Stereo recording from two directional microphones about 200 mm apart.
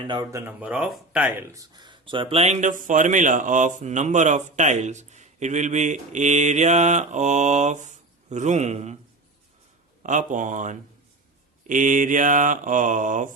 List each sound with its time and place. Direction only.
0.0 s speech: 20° right (ahead or behind)
10.0 s speech: 40° right (ahead or behind)